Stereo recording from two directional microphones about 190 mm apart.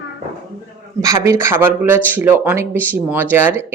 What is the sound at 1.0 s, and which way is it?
Speech, 15° right (ahead or behind).